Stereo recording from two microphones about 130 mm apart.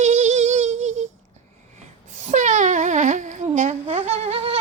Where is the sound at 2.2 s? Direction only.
65° right (ahead or behind).